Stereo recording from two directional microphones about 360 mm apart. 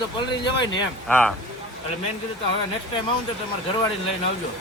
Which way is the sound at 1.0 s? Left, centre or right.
Centre.